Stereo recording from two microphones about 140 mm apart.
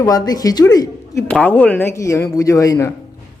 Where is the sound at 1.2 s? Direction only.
10° left (ahead or behind); by 2.9 s 25° left (ahead or behind).